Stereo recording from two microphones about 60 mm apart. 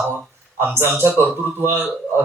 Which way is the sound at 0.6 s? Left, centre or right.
Right.